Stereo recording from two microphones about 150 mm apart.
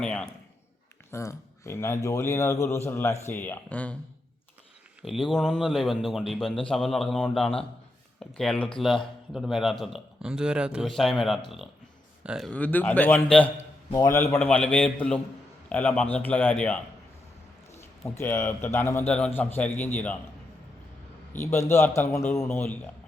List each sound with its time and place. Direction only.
0.0 s a man's voice: 5° left (ahead or behind)
1.1 s speech: 20° left (ahead or behind)
5.0 s speech: centre (ahead or behind)
12.5 s speech: 10° left (ahead or behind)
13.9 s speech: 20° left (ahead or behind)
18.2 s speech: 15° left (ahead or behind)
21.3 s speech: 15° left (ahead or behind)